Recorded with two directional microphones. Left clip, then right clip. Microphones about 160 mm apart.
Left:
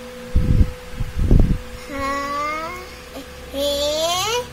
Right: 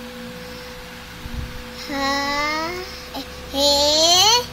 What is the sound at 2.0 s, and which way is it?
Child singing, 30° left (ahead or behind).